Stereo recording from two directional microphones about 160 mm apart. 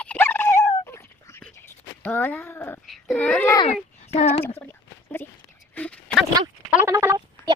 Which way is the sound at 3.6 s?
40° left (ahead or behind).